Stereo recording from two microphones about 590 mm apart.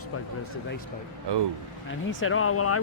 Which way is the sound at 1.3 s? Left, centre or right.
Right.